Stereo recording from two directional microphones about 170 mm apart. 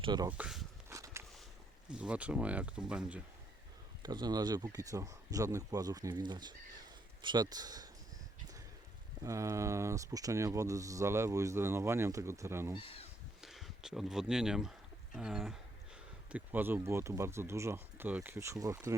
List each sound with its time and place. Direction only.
0.0 s speech: 25° right (ahead or behind)
0.3 s a sound: 5° right (ahead or behind)
0.9 s a sound: 20° right (ahead or behind)
1.9 s speech: 5° right (ahead or behind)
4.0 s speech: 25° right (ahead or behind)
9.2 s speech: 20° right (ahead or behind)
12.8 s speech: 35° left (ahead or behind)
13.4 s speech: centre (ahead or behind)
15.1 s a sound: centre (ahead or behind)
16.3 s speech: 10° right (ahead or behind)